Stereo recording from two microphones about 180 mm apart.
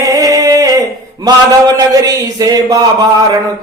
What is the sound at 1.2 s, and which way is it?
A man's voice, 20° right (ahead or behind).